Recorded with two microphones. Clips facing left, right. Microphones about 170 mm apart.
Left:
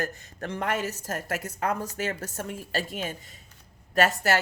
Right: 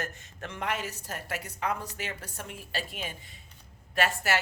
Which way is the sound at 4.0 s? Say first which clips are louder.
Left 5 dB; 40° left (ahead or behind).